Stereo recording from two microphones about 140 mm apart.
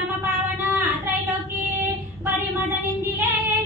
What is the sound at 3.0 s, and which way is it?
Child singing, 15° right (ahead or behind).